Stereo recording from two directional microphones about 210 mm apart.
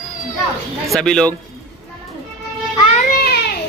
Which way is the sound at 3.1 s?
50° left (ahead or behind).